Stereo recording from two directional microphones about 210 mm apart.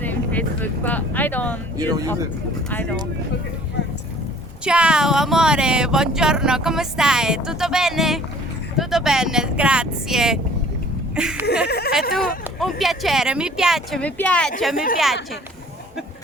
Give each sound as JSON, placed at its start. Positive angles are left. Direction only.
{"t": 0.0, "sound": "speech", "side_deg": 10}
{"t": 1.8, "sound": "speech", "side_deg": -20}
{"t": 4.6, "sound": "speech", "side_deg": -5}
{"t": 11.7, "sound": "speech", "side_deg": 50}
{"t": 12.5, "sound": "speech", "side_deg": 0}